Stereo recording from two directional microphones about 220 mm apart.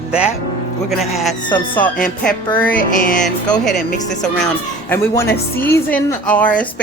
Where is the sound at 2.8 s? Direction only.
40° left (ahead or behind).